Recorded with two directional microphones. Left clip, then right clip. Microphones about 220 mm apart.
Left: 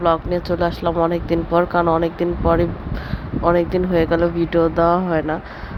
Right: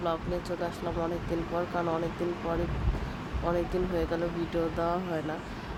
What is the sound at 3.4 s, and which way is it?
Speech, 35° left (ahead or behind).